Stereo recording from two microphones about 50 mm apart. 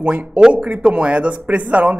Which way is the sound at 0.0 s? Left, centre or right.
Right.